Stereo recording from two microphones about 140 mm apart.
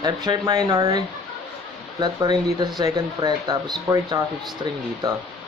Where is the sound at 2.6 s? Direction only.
25° right (ahead or behind).